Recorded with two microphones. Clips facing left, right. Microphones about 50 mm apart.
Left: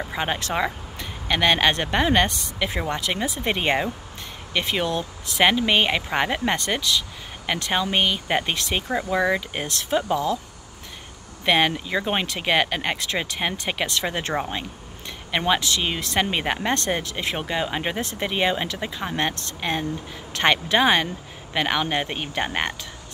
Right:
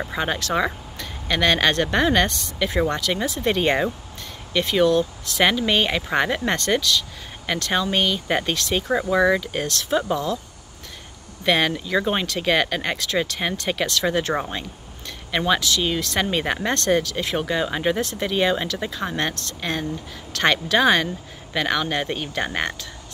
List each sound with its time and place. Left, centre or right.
0.2 s speech: left
9.1 s speech: centre
9.4 s speech: left
11.4 s speech: centre
18.0 s speech: left